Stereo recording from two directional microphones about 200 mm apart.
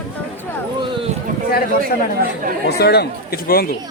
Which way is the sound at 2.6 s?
55° left (ahead or behind).